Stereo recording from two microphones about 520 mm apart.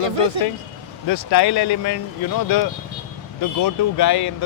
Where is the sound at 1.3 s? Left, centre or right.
Left.